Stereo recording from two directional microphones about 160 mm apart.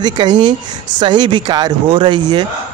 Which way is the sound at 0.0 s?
25° right (ahead or behind).